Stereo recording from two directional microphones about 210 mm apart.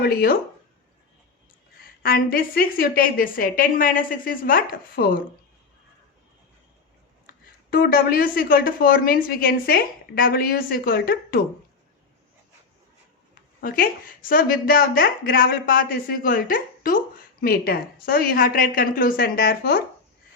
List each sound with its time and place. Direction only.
0.0 s a woman's voice: 45° left (ahead or behind)
2.0 s a woman's voice: 45° left (ahead or behind)
7.3 s a woman's voice: 45° left (ahead or behind)
13.3 s a woman's voice: 40° left (ahead or behind)